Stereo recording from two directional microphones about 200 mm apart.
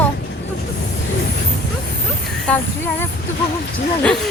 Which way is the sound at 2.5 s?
5° left (ahead or behind).